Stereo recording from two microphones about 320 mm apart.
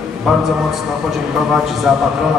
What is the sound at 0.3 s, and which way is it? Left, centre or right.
A man's voice, centre.